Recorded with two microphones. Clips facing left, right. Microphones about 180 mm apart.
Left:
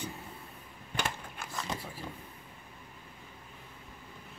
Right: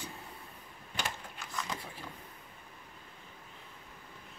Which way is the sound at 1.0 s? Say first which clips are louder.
Left 3 dB; 55° left (ahead or behind).